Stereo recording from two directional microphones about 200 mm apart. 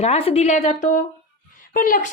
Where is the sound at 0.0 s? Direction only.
30° left (ahead or behind).